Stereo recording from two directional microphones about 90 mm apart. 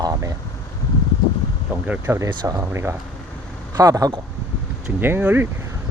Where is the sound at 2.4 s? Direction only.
35° right (ahead or behind).